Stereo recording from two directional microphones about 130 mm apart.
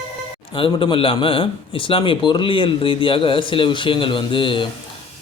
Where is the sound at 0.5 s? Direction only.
40° left (ahead or behind).